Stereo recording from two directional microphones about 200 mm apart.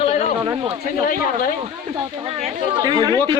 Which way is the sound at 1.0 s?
45° left (ahead or behind).